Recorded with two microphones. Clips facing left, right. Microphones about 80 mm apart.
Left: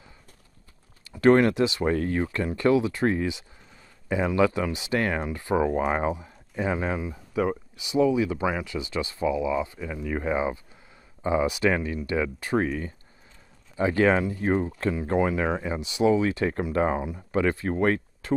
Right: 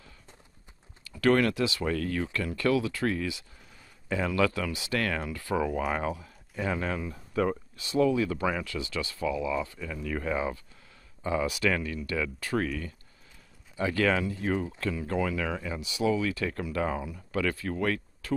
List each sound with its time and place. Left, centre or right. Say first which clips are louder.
1.0 s speech: left 5 dB; left